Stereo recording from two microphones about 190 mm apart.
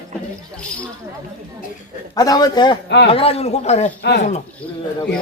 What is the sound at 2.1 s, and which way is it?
A man's voice, 20° left (ahead or behind).